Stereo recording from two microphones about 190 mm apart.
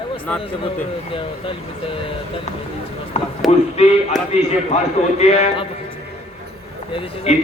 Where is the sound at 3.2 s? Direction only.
35° left (ahead or behind).